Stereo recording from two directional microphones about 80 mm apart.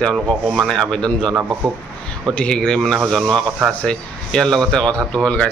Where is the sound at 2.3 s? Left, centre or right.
Centre.